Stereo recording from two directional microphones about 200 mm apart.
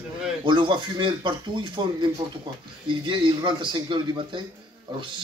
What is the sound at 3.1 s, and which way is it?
Speech, 25° right (ahead or behind).